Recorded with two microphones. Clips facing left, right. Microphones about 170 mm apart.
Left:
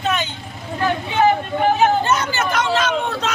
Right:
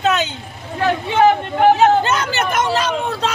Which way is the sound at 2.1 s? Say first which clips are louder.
Right 1 dB; 65° right (ahead or behind).